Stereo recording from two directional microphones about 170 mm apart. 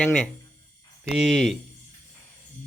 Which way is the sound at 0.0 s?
5° left (ahead or behind).